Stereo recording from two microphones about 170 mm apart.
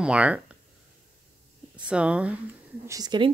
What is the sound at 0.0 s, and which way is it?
Speech, 5° right (ahead or behind).